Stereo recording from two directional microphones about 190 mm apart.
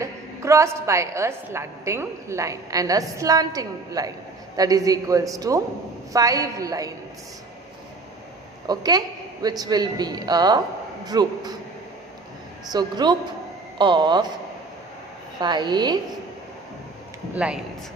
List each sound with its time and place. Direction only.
0.0 s a woman's voice: 15° right (ahead or behind)
8.6 s a woman's voice: 20° right (ahead or behind)
12.7 s a woman's voice: 20° right (ahead or behind)
15.4 s a woman's voice: 25° right (ahead or behind)
17.3 s a woman's voice: 5° right (ahead or behind)